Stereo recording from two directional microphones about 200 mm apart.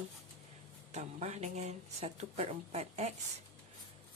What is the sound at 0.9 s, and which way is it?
Speech, 35° right (ahead or behind).